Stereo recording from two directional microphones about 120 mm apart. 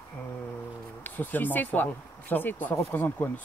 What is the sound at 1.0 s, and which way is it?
Speech, 15° left (ahead or behind).